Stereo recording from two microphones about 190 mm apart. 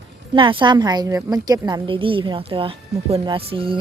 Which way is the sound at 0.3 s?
25° right (ahead or behind).